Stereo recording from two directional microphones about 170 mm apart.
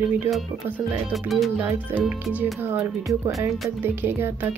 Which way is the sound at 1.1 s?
Centre (ahead or behind).